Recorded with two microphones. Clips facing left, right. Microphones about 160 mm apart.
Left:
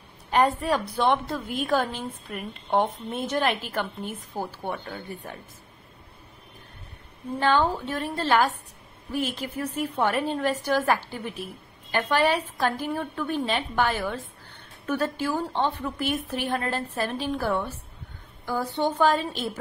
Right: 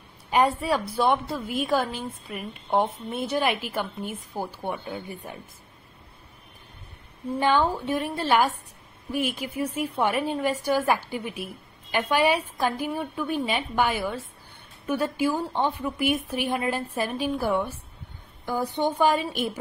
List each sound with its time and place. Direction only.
0.3 s a woman's voice: 10° right (ahead or behind)
7.3 s a woman's voice: 15° right (ahead or behind)